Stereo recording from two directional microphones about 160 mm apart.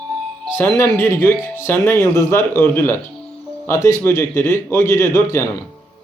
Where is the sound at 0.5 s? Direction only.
15° left (ahead or behind).